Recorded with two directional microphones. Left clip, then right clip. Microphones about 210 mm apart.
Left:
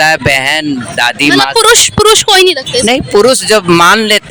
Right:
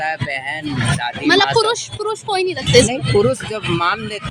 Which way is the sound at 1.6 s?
50° left (ahead or behind).